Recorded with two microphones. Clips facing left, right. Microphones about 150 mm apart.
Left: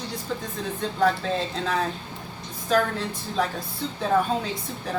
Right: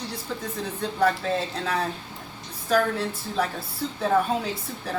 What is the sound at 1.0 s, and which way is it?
Speech, centre (ahead or behind).